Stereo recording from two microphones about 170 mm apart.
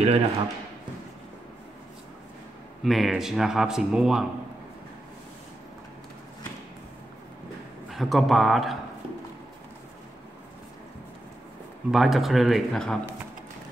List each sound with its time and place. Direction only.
0.0 s speech: 35° right (ahead or behind)
2.8 s speech: centre (ahead or behind)
7.9 s speech: centre (ahead or behind)
11.9 s speech: centre (ahead or behind)